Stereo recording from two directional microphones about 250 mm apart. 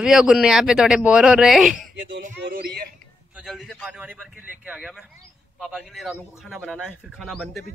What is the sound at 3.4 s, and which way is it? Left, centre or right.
Speech, centre.